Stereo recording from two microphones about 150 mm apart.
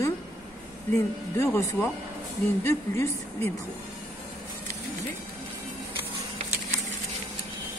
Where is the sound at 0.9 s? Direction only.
20° left (ahead or behind).